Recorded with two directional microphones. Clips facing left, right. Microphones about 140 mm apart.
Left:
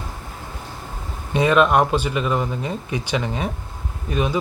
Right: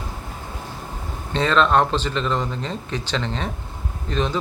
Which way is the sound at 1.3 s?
15° left (ahead or behind).